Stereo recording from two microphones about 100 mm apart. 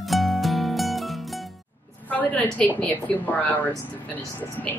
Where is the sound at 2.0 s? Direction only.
15° left (ahead or behind).